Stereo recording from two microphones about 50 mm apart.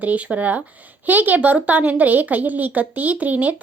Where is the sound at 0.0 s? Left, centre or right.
Right.